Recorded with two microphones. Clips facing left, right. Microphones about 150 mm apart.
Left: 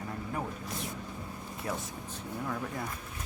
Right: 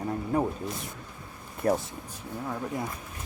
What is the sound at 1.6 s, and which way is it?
Speech, 45° right (ahead or behind).